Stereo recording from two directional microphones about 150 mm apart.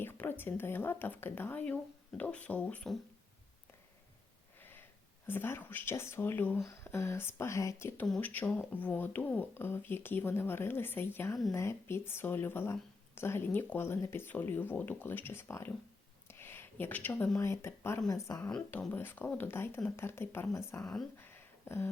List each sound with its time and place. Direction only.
0.0 s speech: 15° left (ahead or behind)
5.2 s speech: 15° left (ahead or behind)
8.0 s a woman's voice: 5° left (ahead or behind)
18.5 s speech: 10° left (ahead or behind)
20.8 s speech: 5° left (ahead or behind)
21.2 s a sound: 15° left (ahead or behind)